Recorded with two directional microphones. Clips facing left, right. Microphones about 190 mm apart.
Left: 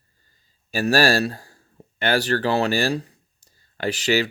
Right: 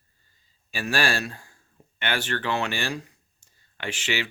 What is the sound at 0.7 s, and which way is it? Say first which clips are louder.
Speech: left 8 dB; 40° left (ahead or behind).